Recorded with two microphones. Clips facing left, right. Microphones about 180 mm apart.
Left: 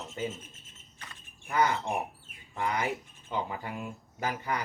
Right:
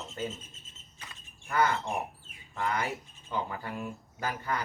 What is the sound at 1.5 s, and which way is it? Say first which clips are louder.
Speech: left 1 dB; 15° left (ahead or behind).